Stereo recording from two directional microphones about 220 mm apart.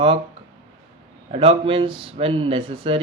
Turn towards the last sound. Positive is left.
turn(degrees=-25)  # may be behind; listen again after turning